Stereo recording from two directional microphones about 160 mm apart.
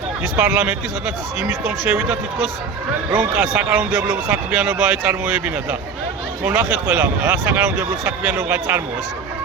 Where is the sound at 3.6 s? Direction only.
10° right (ahead or behind).